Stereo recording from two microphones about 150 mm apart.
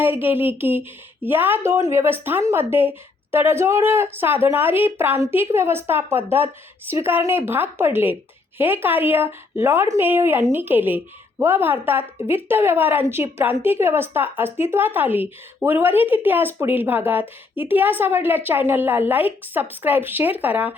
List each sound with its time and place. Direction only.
0.0 s a woman's voice: 15° right (ahead or behind)